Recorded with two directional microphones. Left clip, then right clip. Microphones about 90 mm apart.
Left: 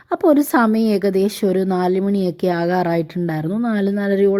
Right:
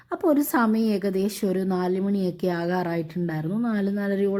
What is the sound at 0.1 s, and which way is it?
A woman's voice, 50° left (ahead or behind).